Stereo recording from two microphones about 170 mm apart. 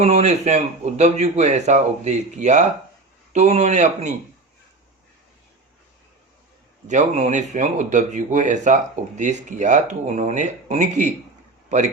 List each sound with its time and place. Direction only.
0.0 s speech: 40° right (ahead or behind)
6.8 s speech: 45° right (ahead or behind)